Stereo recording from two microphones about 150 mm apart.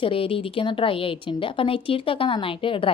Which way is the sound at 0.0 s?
40° left (ahead or behind).